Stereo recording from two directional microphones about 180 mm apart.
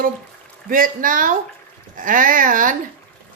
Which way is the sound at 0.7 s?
50° right (ahead or behind).